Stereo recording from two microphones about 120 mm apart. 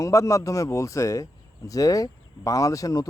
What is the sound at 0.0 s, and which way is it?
Speech, 25° left (ahead or behind).